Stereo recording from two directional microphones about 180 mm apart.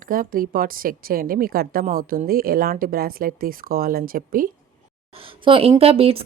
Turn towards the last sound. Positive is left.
turn(degrees=-35)  # may be behind; listen again after turning